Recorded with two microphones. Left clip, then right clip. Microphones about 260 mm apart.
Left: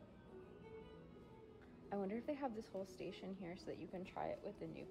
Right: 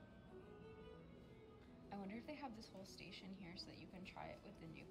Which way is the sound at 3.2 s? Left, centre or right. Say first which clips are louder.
Left 6 dB; centre.